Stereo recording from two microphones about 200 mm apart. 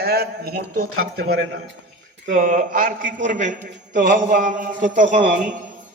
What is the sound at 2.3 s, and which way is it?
A man's voice, 40° right (ahead or behind).